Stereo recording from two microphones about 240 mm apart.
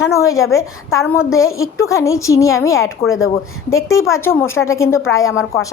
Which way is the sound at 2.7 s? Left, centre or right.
Left.